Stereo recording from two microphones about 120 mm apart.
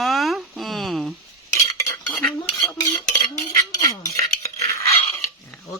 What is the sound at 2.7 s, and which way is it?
Dishes, 30° left (ahead or behind).